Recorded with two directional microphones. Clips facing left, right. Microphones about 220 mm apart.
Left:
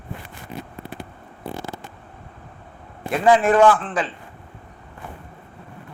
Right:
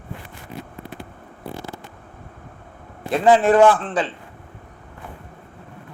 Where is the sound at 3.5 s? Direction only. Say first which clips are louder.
Right 2 dB; 20° right (ahead or behind).